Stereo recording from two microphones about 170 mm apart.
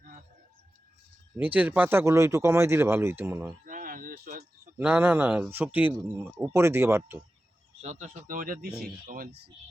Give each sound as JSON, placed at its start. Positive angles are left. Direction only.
{"t": 1.4, "sound": "speech", "side_deg": -10}
{"t": 3.7, "sound": "a sound", "side_deg": -55}
{"t": 4.8, "sound": "speech", "side_deg": -10}
{"t": 7.8, "sound": "speech", "side_deg": -45}